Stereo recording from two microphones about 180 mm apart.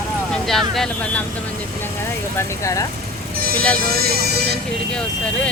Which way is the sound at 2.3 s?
15° left (ahead or behind).